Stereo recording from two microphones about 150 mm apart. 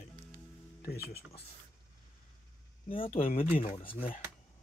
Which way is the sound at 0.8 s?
90° left.